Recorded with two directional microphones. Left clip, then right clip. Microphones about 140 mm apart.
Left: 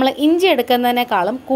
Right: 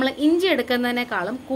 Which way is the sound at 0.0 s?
35° left (ahead or behind).